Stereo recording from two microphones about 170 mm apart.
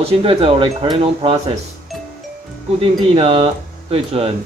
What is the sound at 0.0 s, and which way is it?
Speech, 35° right (ahead or behind).